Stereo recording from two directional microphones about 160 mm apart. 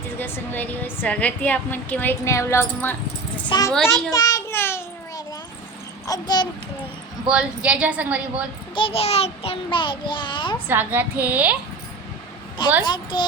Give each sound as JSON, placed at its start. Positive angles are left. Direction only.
{"t": 0.2, "sound": "a woman's voice", "side_deg": 15}
{"t": 3.5, "sound": "a child's voice", "side_deg": 30}
{"t": 4.1, "sound": "child singing", "side_deg": 25}
{"t": 6.1, "sound": "a child's voice", "side_deg": 25}
{"t": 7.3, "sound": "a woman's voice", "side_deg": -5}
{"t": 8.7, "sound": "child singing", "side_deg": 35}
{"t": 10.7, "sound": "a woman's voice", "side_deg": -10}
{"t": 12.8, "sound": "a child's voice", "side_deg": 30}